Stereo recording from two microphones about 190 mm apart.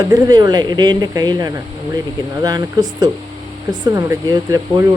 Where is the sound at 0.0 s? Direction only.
20° right (ahead or behind).